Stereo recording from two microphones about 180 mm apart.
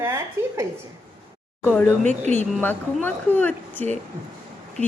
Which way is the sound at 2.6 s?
10° left (ahead or behind).